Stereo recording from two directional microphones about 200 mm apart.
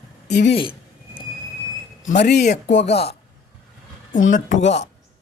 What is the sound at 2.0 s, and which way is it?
Speech, 55° left (ahead or behind).